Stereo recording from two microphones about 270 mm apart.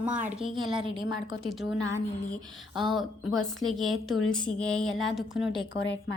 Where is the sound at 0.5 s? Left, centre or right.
Centre.